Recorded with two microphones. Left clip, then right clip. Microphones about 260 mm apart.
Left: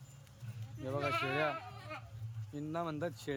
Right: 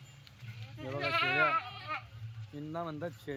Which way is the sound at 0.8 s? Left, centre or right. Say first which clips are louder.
Right 4 dB; centre.